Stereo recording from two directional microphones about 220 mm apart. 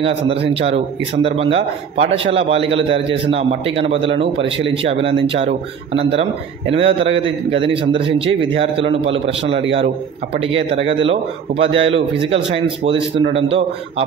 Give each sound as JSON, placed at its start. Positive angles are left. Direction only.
{"t": 0.0, "sound": "speech", "side_deg": -25}